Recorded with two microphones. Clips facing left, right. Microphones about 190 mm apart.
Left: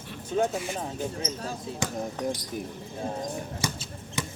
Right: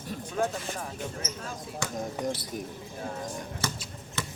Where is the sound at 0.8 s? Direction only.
30° left (ahead or behind).